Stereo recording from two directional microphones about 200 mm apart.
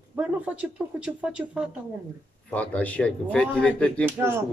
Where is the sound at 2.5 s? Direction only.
5° left (ahead or behind).